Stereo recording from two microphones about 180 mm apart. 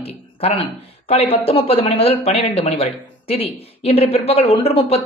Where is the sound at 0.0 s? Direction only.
35° left (ahead or behind).